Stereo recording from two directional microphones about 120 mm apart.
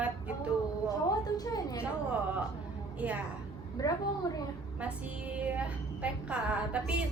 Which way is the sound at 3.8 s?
30° left (ahead or behind).